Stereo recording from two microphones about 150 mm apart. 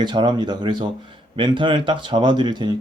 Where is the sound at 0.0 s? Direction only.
30° right (ahead or behind).